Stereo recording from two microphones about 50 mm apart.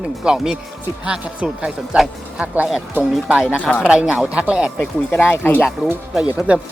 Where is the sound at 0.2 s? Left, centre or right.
Centre.